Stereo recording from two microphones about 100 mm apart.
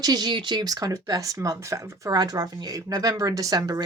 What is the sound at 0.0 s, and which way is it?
Speech, 40° right (ahead or behind).